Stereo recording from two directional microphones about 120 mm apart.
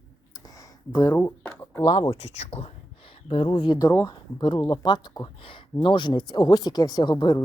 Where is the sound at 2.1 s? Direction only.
65° left (ahead or behind).